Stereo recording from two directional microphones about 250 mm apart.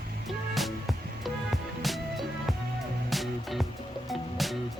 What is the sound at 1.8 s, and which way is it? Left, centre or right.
Music, centre.